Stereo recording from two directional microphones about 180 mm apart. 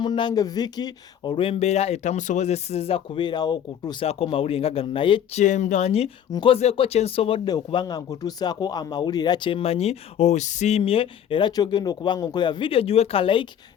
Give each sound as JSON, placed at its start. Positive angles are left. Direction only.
{"t": 0.0, "sound": "speech", "side_deg": 25}
{"t": 5.4, "sound": "speech", "side_deg": 40}